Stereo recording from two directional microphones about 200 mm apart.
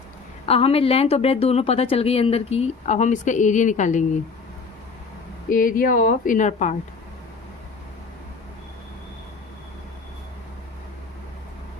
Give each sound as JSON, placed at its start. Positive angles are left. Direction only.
{"t": 0.4, "sound": "a woman's voice", "side_deg": 30}
{"t": 5.5, "sound": "a woman's voice", "side_deg": 40}